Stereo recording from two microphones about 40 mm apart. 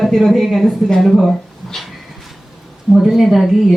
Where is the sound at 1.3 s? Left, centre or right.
Centre.